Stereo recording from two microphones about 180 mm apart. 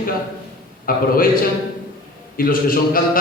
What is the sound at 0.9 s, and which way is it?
Speech, 50° left (ahead or behind).